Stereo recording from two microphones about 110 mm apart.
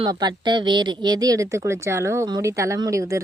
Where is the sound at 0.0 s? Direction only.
40° right (ahead or behind).